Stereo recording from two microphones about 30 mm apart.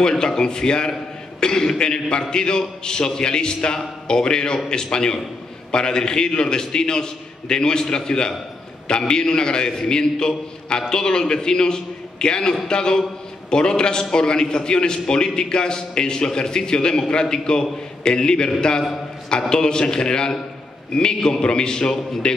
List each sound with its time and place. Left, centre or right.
0.0 s a man's voice: left
19.5 s a man's voice: left